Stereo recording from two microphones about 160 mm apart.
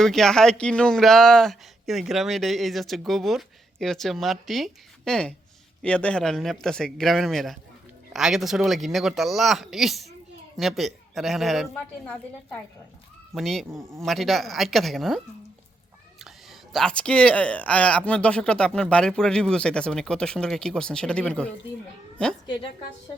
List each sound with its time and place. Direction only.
0.0 s speech: centre (ahead or behind)
13.7 s speech: 15° right (ahead or behind)
14.0 s speech: centre (ahead or behind)